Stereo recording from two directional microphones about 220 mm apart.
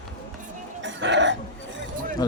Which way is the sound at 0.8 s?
55° right (ahead or behind).